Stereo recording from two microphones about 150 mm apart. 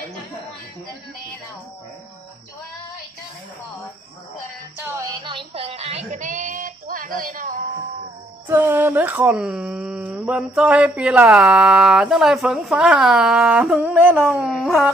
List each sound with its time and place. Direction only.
4.8 s music: 20° right (ahead or behind)
5.3 s a sound: 40° right (ahead or behind); by 7.6 s 65° right (ahead or behind)
8.5 s speech: 15° right (ahead or behind)